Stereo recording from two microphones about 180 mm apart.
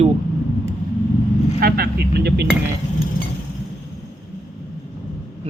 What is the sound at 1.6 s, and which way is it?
Speech, 60° right (ahead or behind).